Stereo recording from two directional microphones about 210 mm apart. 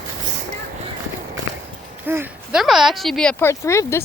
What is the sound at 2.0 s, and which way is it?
Speech, 10° right (ahead or behind).